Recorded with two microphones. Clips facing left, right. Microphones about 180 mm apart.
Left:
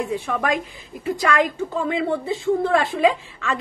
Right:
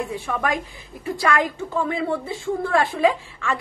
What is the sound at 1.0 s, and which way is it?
A woman's voice, 20° left (ahead or behind).